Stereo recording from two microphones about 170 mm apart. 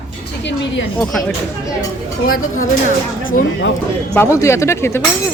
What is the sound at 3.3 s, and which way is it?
Speech, 50° left (ahead or behind).